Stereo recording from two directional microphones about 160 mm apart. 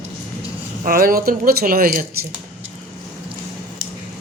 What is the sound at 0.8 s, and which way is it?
Speech, 60° right (ahead or behind).